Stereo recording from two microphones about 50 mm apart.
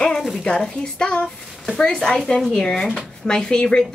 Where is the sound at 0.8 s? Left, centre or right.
Centre.